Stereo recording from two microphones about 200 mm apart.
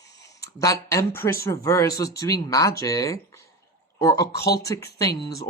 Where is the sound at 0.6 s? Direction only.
15° left (ahead or behind).